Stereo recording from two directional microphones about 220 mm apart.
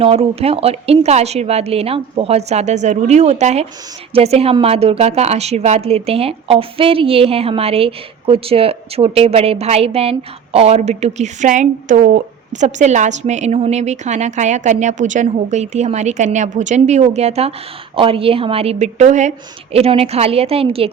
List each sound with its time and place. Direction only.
0.0 s a woman's voice: 30° right (ahead or behind)